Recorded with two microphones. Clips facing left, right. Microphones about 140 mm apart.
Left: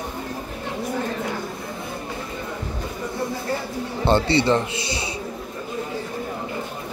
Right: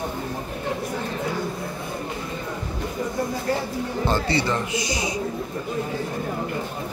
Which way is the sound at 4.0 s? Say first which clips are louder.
Left 5 dB; 25° left (ahead or behind).